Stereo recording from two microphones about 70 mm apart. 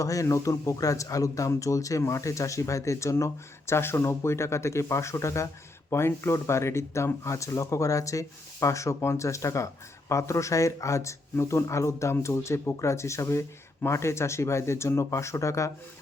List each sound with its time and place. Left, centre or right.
0.0 s speech: left